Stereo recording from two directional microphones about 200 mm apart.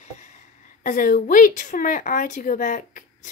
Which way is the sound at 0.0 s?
35° left (ahead or behind).